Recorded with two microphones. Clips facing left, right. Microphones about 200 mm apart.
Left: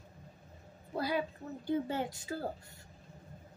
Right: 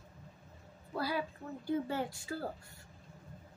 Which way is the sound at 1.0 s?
20° left (ahead or behind).